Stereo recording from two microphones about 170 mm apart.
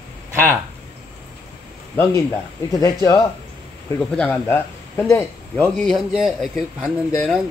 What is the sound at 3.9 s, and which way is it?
A man's voice, 5° left (ahead or behind).